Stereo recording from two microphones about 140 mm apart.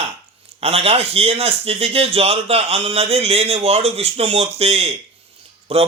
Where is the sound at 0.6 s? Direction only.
45° right (ahead or behind).